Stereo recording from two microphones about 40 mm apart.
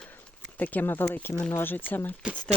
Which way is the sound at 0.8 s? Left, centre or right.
Left.